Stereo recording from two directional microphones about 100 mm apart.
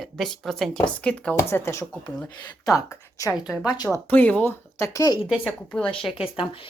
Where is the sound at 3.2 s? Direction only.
35° left (ahead or behind).